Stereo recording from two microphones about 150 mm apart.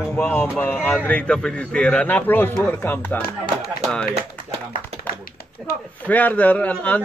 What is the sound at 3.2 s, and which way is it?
Speech, 90° left.